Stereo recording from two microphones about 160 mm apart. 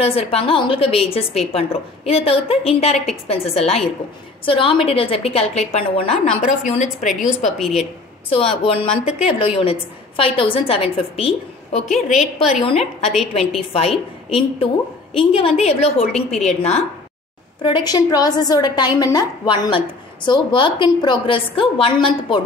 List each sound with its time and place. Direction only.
0.0 s a woman's voice: 40° left (ahead or behind)
6.2 s a woman's voice: centre (ahead or behind)
6.8 s a woman's voice: 50° left (ahead or behind)
7.4 s a woman's voice: centre (ahead or behind)
8.3 s a woman's voice: 35° left (ahead or behind)
11.8 s a woman's voice: centre (ahead or behind)
12.6 s a woman's voice: 40° left (ahead or behind)
17.6 s a woman's voice: 30° left (ahead or behind)